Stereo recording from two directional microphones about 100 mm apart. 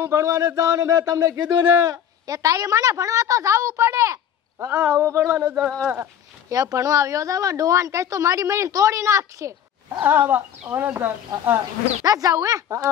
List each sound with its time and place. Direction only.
0.0 s a man's voice: 30° right (ahead or behind)
6.5 s a man's voice: 35° right (ahead or behind)
10.0 s speech: 20° right (ahead or behind)
12.0 s a man's voice: 35° right (ahead or behind)